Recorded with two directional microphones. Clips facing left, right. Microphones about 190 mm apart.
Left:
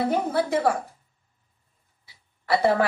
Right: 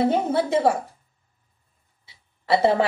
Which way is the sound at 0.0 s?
25° right (ahead or behind).